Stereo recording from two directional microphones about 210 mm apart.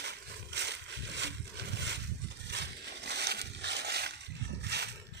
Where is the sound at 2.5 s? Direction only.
55° right (ahead or behind).